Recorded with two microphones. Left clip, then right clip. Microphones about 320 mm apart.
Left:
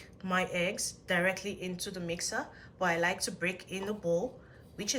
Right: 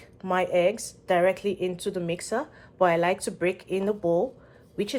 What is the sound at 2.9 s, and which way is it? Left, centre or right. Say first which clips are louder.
Speech: right 3 dB; centre.